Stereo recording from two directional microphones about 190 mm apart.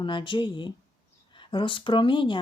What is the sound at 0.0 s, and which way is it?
Speech, 25° left (ahead or behind).